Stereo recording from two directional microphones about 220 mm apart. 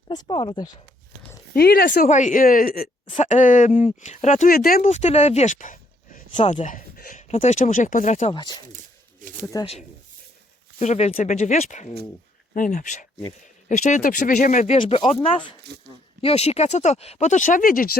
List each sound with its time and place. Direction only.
0.1 s speech: 20° left (ahead or behind)
1.5 s speech: 45° left (ahead or behind)
8.3 s speech: 20° left (ahead or behind)
9.2 s a sound: 35° right (ahead or behind)
10.8 s speech: 30° left (ahead or behind)
15.6 s speech: 50° right (ahead or behind)
16.2 s speech: 30° left (ahead or behind)